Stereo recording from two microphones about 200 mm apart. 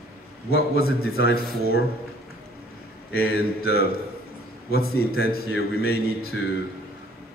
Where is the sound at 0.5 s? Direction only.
50° left (ahead or behind).